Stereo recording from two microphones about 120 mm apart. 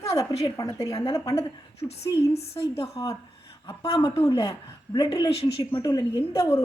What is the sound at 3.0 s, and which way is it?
A woman's voice, 40° left (ahead or behind).